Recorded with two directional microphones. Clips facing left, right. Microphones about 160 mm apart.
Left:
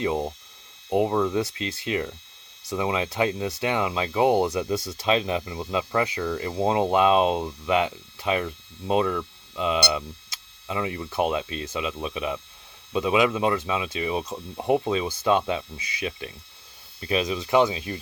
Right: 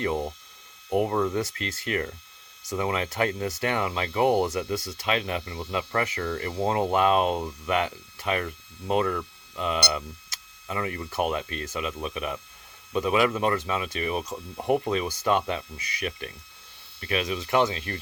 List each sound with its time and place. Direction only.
0.0 s speech: 20° left (ahead or behind)
1.1 s speech: 10° left (ahead or behind)